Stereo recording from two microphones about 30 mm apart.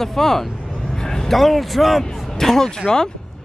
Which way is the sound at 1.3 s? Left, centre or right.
Centre.